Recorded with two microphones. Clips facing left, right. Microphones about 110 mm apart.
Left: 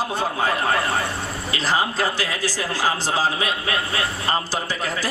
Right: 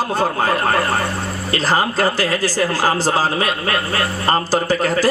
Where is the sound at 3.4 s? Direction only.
50° right (ahead or behind).